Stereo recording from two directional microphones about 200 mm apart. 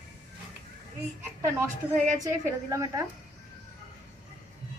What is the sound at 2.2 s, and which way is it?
Speech, 15° right (ahead or behind).